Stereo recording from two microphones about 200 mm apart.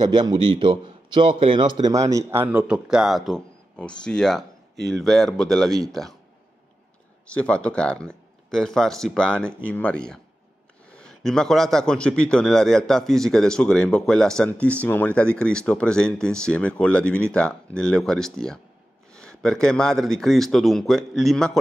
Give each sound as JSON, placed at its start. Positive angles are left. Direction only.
{"t": 0.0, "sound": "a man's voice", "side_deg": -20}
{"t": 7.2, "sound": "a man's voice", "side_deg": 5}